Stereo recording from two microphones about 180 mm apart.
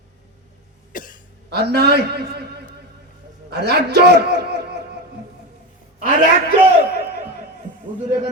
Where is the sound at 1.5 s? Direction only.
65° right (ahead or behind).